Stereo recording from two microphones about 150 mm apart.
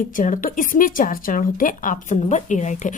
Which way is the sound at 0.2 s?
60° left (ahead or behind).